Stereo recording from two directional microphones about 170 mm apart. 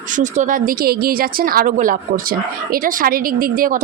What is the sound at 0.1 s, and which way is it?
A woman's voice, 50° right (ahead or behind).